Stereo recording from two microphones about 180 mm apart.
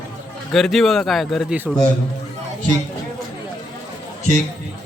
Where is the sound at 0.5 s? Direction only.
Centre (ahead or behind).